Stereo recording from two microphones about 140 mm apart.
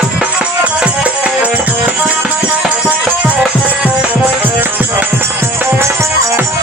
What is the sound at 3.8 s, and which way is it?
Music, 10° right (ahead or behind).